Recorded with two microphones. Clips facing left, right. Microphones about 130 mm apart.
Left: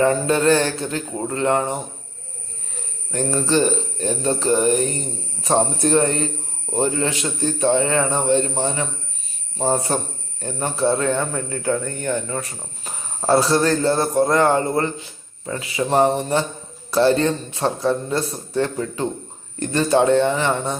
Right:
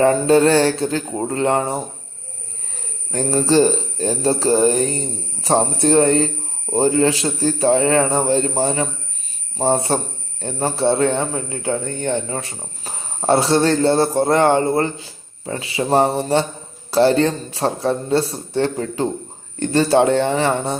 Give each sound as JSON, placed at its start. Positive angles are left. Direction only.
{"t": 0.0, "sound": "speech", "side_deg": -30}
{"t": 3.1, "sound": "a man's voice", "side_deg": -30}